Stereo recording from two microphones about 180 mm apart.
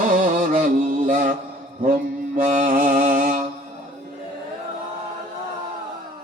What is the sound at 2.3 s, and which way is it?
Mantra, 45° right (ahead or behind).